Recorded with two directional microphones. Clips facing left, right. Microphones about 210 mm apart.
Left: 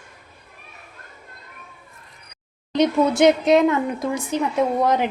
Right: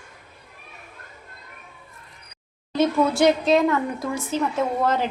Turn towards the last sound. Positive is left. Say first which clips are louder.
# left 3 dB
turn(degrees=15)  # may be behind; listen again after turning